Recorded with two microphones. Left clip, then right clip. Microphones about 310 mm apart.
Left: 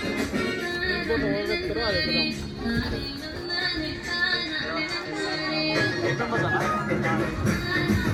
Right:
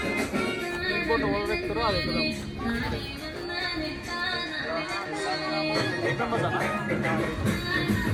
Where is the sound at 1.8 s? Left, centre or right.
Right.